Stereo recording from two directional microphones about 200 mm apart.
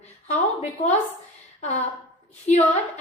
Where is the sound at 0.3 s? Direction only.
35° left (ahead or behind).